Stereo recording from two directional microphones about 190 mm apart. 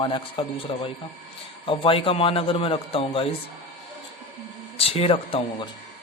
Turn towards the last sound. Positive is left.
turn(degrees=30)  # may be behind; listen again after turning